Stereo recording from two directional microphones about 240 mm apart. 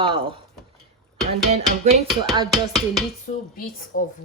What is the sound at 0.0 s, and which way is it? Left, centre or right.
Speech, right.